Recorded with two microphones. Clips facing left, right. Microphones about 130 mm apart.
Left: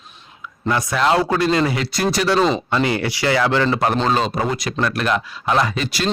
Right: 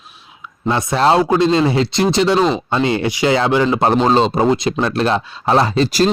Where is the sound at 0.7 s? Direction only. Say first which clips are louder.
Right 4 dB; 25° right (ahead or behind).